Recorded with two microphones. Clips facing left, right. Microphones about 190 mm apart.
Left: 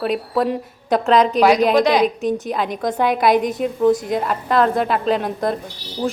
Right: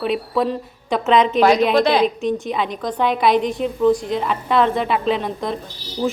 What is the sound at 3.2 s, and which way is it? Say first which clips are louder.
Speech: left 1 dB; 45° left (ahead or behind).